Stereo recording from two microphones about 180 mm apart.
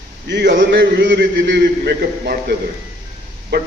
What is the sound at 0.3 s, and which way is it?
A man's voice, 75° right (ahead or behind).